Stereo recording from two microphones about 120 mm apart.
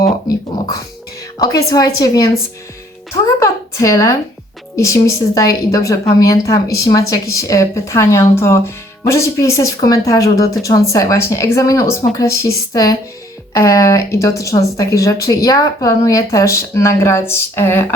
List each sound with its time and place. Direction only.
1.4 s speech: 30° left (ahead or behind)
3.4 s speech: 25° left (ahead or behind)